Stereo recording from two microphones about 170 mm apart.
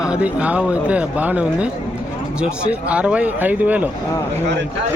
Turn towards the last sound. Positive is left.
turn(degrees=-10)  # may be behind; listen again after turning